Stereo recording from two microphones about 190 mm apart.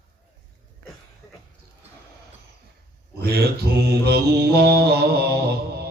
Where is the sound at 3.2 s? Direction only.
55° right (ahead or behind).